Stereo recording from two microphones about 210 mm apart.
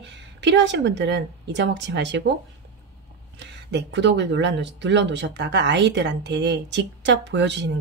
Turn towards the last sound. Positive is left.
turn(degrees=-55)  # may be behind; listen again after turning